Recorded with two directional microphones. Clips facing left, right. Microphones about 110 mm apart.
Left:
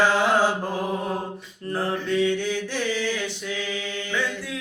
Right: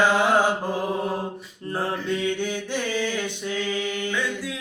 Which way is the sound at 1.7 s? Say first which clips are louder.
Left 2 dB; 15° right (ahead or behind).